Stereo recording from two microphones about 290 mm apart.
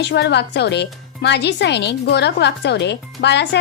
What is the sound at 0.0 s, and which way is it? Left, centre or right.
A woman's voice, left.